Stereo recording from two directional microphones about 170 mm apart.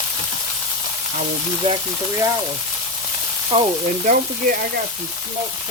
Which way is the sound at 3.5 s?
30° right (ahead or behind).